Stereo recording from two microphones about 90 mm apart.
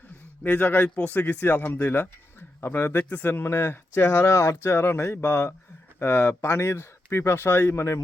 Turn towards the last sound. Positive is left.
turn(degrees=30)  # may be behind; listen again after turning